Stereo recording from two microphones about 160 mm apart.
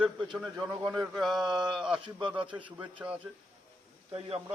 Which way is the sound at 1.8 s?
5° right (ahead or behind).